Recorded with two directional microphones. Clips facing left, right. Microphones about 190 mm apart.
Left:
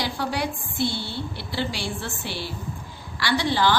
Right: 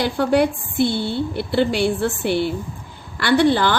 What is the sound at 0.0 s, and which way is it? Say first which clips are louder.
A woman's voice: right 10 dB; 55° right (ahead or behind).